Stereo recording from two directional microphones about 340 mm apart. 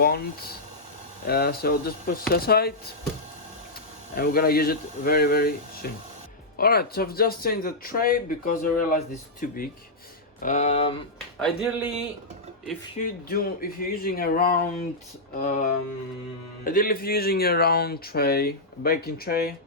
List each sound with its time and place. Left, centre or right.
0.0 s speech: left
4.2 s speech: left
11.3 s speech: centre
13.0 s speech: left
16.6 s speech: left